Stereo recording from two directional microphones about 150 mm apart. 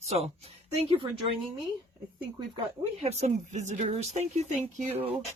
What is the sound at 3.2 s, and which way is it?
Speech, 50° right (ahead or behind).